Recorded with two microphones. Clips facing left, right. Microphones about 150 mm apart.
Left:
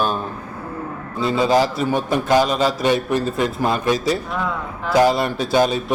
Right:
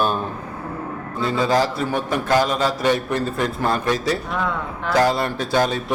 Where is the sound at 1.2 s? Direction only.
15° left (ahead or behind).